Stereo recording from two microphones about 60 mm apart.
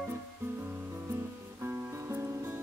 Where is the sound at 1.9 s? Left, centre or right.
Right.